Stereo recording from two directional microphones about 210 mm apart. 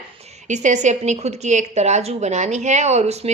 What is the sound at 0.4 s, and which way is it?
A woman's voice, 35° right (ahead or behind).